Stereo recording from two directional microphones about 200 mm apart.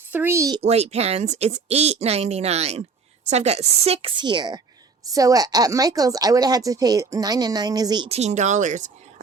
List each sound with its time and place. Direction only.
0.1 s speech: 10° right (ahead or behind)
0.6 s speech: 30° right (ahead or behind)